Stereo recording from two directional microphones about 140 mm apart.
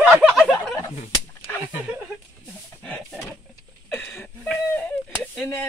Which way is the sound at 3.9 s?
5° left (ahead or behind).